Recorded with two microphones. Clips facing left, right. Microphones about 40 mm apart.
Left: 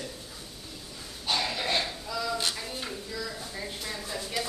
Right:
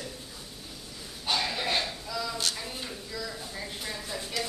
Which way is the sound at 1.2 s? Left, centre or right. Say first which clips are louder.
Even; centre.